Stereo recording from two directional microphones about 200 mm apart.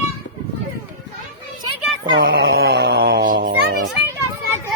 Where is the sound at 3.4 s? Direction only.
60° right (ahead or behind).